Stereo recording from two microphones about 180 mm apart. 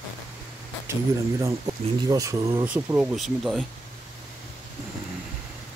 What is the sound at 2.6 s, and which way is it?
Speech, 10° right (ahead or behind).